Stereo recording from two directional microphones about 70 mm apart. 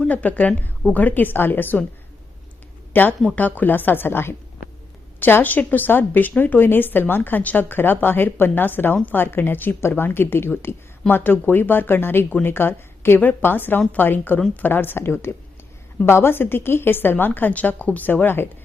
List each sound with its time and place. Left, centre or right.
0.1 s a woman's voice: left
2.9 s a woman's voice: left